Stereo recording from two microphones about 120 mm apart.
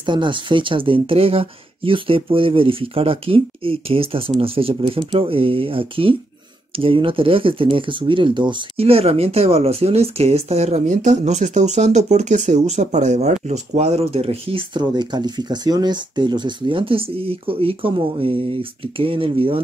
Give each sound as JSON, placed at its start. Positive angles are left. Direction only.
{"t": 0.0, "sound": "speech", "side_deg": -40}
{"t": 8.7, "sound": "speech", "side_deg": -55}